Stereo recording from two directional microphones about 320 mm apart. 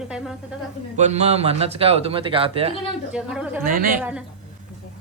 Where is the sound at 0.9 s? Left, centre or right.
Right.